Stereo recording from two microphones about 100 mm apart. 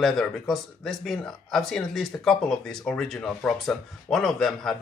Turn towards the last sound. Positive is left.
turn(degrees=5)  # may be behind; listen again after turning